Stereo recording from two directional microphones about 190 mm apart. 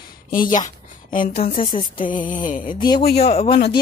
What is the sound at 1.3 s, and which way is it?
Speech, 30° left (ahead or behind).